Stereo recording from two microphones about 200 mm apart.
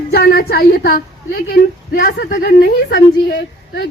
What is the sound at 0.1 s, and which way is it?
A woman's voice, 50° left (ahead or behind).